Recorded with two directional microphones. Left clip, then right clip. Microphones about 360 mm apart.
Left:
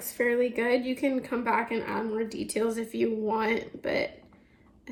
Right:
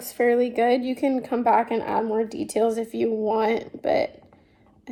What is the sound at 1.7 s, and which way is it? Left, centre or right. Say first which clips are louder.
Speech: right 7 dB; right.